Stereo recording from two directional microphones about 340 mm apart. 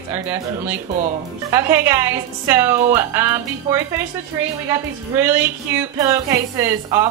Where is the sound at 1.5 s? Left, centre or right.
Centre.